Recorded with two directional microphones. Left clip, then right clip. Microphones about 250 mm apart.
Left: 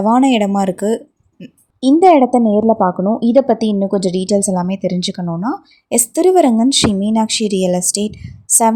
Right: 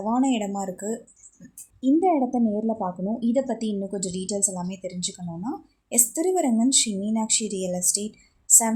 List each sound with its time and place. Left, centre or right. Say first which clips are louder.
0.0 s a woman's voice: left 12 dB; left